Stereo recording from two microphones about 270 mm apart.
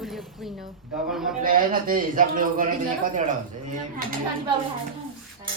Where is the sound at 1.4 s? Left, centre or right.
Right.